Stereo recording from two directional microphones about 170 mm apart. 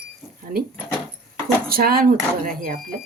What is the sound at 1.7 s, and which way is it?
Speech, 60° right (ahead or behind).